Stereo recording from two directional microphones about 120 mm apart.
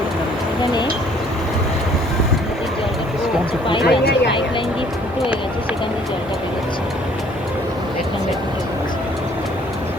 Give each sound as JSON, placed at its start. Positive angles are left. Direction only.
{"t": 3.7, "sound": "speech", "side_deg": 45}